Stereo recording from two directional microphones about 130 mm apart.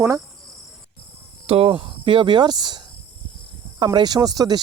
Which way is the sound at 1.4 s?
50° right (ahead or behind).